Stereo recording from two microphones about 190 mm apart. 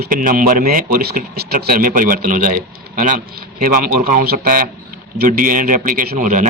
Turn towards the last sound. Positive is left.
turn(degrees=-45)  # may be behind; listen again after turning